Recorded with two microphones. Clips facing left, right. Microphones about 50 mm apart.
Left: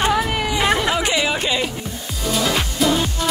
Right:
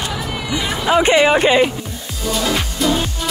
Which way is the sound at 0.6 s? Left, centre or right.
Left.